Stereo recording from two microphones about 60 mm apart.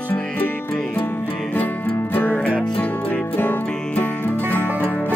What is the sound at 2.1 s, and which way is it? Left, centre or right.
Music, left.